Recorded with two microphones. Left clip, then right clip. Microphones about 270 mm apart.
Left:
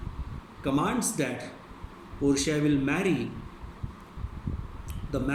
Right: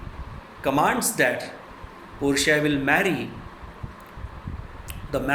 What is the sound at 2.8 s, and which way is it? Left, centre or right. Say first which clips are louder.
Speech: right 7 dB; centre.